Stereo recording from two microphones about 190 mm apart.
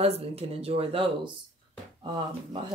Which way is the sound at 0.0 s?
30° right (ahead or behind).